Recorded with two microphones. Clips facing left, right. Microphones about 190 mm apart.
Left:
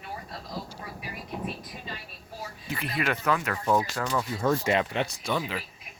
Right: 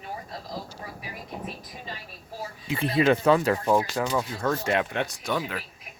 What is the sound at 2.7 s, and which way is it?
Speech, 25° right (ahead or behind).